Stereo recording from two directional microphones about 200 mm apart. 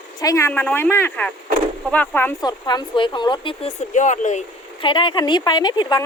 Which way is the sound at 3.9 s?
40° left (ahead or behind).